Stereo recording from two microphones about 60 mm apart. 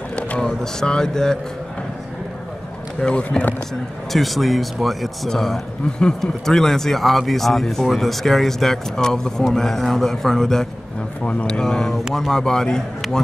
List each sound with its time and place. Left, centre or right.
0.1 s a sound: centre
0.5 s speech: centre
3.0 s speech: centre
4.1 s a man's voice: centre